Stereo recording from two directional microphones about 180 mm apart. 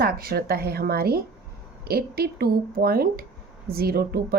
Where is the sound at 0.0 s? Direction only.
55° right (ahead or behind).